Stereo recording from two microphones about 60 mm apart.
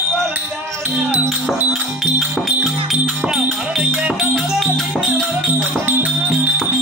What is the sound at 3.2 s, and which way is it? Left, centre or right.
Music, right.